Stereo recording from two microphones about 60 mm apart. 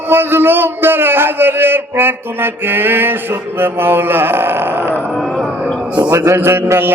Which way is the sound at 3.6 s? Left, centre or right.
Right.